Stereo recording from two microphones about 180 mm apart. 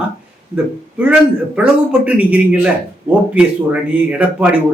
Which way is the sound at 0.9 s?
5° right (ahead or behind).